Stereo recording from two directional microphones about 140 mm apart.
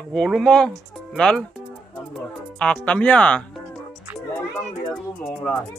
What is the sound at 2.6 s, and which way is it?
Speech, 10° left (ahead or behind).